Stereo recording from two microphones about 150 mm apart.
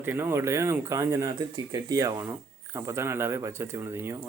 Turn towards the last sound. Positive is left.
turn(degrees=-15)  # may be behind; listen again after turning